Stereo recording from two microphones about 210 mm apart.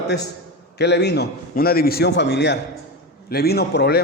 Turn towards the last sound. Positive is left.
turn(degrees=50)  # may be behind; listen again after turning